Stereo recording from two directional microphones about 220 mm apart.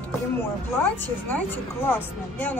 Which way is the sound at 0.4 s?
10° left (ahead or behind).